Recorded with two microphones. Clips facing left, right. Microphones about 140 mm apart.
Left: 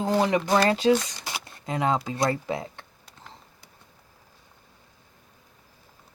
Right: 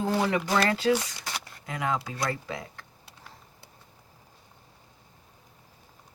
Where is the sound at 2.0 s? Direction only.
25° left (ahead or behind).